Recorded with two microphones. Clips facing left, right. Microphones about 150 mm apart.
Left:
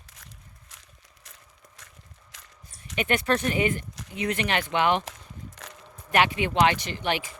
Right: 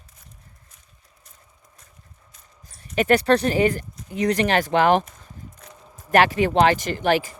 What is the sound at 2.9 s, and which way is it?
Speech, 40° right (ahead or behind).